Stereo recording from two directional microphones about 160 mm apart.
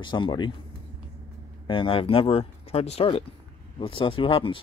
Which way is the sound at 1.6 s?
30° left (ahead or behind).